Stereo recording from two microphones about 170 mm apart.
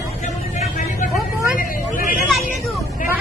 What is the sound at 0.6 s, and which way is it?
Vehicle, 45° left (ahead or behind).